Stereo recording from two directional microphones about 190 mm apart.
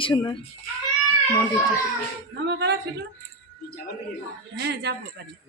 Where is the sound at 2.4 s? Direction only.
65° right (ahead or behind).